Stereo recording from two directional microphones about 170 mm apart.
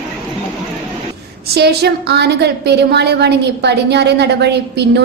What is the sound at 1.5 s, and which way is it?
A woman's voice, 75° right (ahead or behind).